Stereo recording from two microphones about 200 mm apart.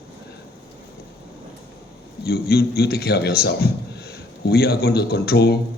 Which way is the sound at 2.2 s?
50° left (ahead or behind).